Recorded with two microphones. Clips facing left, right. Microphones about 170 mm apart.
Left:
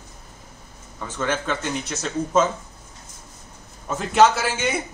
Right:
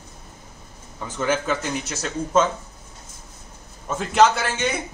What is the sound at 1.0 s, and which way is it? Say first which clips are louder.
Speech: right 2 dB; 10° right (ahead or behind).